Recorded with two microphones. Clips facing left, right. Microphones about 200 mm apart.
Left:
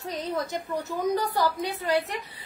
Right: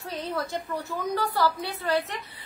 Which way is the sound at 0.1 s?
20° left (ahead or behind).